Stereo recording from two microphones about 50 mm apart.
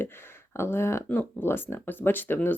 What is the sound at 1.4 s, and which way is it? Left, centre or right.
Speech, left.